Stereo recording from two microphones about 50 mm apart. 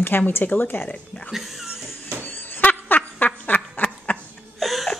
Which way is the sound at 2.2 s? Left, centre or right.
Left.